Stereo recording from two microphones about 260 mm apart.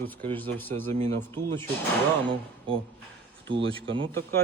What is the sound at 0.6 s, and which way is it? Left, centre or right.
Speech, centre.